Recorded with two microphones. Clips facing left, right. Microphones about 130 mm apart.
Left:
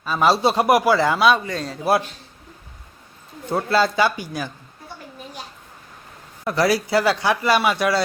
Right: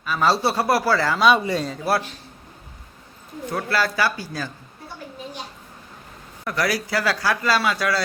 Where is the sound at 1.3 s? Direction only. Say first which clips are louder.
Right 2 dB; 10° right (ahead or behind).